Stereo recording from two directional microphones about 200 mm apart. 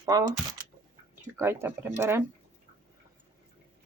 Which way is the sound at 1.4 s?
10° right (ahead or behind).